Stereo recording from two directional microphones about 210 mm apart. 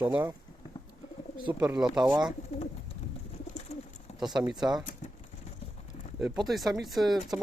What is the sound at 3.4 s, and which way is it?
Bird, 30° left (ahead or behind).